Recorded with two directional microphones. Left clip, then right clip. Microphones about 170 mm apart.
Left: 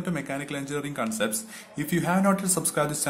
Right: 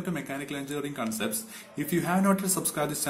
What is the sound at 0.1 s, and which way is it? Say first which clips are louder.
Speech: left 3 dB; 20° left (ahead or behind).